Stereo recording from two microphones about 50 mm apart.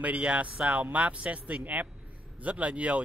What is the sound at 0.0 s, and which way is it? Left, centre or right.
Speech, right.